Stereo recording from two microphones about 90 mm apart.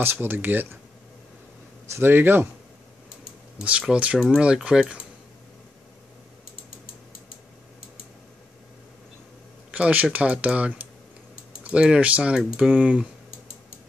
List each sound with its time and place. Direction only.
0.0 s speech: 25° right (ahead or behind)
1.9 s speech: 25° right (ahead or behind)
3.9 s speech: 15° right (ahead or behind)
9.7 s speech: 15° right (ahead or behind)